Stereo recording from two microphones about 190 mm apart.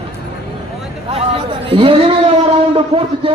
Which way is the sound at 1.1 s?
30° right (ahead or behind).